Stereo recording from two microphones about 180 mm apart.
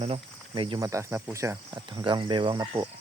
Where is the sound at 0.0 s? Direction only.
30° right (ahead or behind).